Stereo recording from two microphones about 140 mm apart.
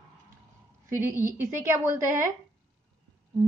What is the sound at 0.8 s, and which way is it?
A woman's voice, 20° right (ahead or behind).